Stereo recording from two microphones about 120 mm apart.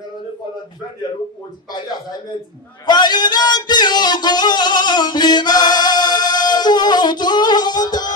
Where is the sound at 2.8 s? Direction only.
35° left (ahead or behind).